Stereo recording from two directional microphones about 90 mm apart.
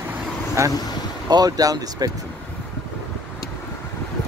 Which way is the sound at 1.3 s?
45° right (ahead or behind).